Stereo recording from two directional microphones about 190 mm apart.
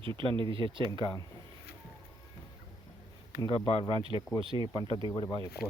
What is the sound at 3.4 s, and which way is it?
Speech, 30° left (ahead or behind).